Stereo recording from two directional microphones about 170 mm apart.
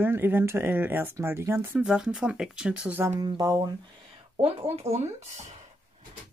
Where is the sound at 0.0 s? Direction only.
10° right (ahead or behind).